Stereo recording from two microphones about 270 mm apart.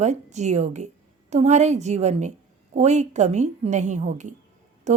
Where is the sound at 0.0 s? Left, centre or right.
Right.